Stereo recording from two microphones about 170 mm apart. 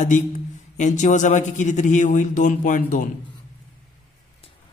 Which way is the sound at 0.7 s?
45° left (ahead or behind).